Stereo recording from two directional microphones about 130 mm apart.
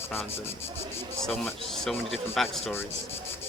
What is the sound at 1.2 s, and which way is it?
Speech, 5° left (ahead or behind).